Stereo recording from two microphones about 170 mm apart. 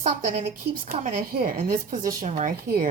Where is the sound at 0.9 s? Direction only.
60° right (ahead or behind).